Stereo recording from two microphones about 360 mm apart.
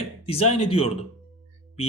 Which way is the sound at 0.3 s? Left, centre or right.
Centre.